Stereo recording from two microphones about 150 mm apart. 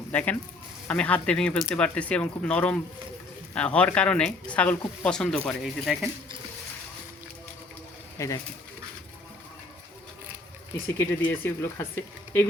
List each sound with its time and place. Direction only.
0.1 s speech: 10° left (ahead or behind)
8.2 s speech: 20° left (ahead or behind)
10.9 s speech: 15° left (ahead or behind)